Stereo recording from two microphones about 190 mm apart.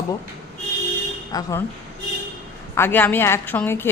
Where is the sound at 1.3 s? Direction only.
20° left (ahead or behind).